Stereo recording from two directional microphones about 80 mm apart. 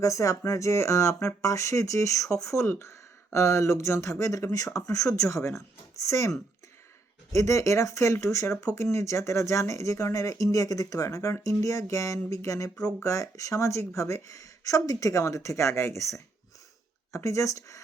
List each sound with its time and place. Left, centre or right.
0.0 s speech: left
7.3 s speech: left